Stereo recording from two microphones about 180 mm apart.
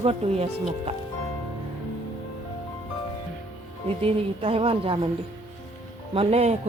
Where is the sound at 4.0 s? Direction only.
30° right (ahead or behind).